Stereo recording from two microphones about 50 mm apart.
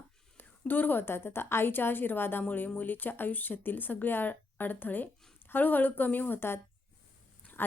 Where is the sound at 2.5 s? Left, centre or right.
Left.